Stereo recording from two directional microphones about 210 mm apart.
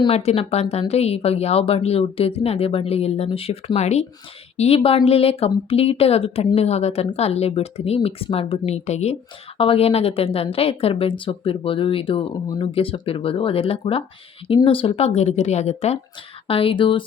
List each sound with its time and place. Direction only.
0.0 s a woman's voice: 30° left (ahead or behind)